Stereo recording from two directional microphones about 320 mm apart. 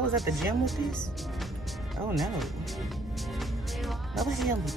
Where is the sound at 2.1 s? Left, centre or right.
Centre.